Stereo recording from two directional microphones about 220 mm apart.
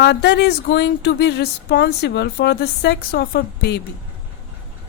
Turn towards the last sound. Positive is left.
turn(degrees=45)  # may be behind; listen again after turning